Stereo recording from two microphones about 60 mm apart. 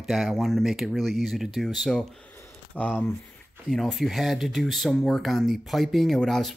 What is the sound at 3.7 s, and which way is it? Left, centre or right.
Speech, centre.